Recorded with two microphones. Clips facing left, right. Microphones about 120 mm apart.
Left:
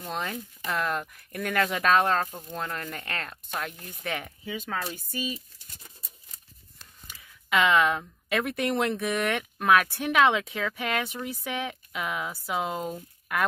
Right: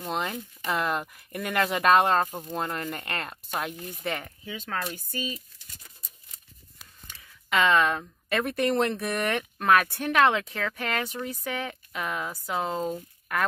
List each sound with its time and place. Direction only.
0.1 s speech: centre (ahead or behind)
4.5 s speech: 10° left (ahead or behind)
7.1 s a sound: 5° left (ahead or behind)
8.6 s speech: 5° left (ahead or behind)